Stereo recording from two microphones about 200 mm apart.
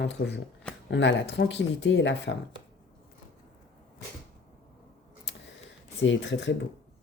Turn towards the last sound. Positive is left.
turn(degrees=65)  # may be behind; listen again after turning